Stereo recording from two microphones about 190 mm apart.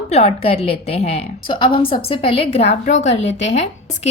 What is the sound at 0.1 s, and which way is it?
A woman's voice, 35° left (ahead or behind).